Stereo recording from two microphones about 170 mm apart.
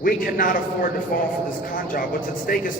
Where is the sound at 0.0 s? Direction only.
55° left (ahead or behind).